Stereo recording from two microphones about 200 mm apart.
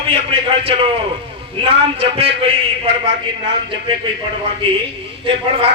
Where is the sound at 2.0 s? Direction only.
30° right (ahead or behind).